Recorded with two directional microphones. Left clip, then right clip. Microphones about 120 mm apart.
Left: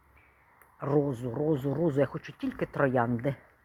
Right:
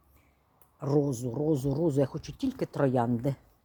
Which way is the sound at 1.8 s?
35° right (ahead or behind).